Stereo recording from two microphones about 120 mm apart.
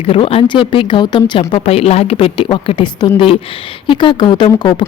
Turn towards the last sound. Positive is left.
turn(degrees=40)  # may be behind; listen again after turning